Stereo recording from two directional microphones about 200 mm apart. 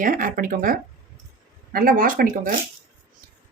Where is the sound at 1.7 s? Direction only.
45° right (ahead or behind).